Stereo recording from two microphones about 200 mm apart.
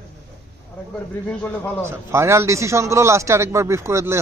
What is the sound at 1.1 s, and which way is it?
Speech, 10° left (ahead or behind).